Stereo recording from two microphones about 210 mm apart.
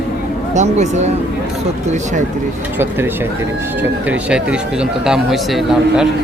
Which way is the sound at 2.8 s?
10° right (ahead or behind).